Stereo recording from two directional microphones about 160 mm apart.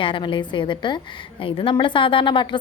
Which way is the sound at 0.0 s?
30° left (ahead or behind).